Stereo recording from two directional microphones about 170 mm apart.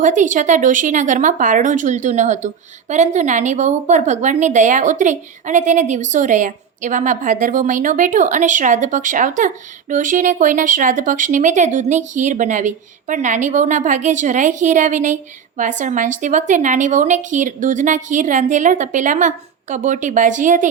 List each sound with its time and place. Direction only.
0.0 s speech: 50° right (ahead or behind)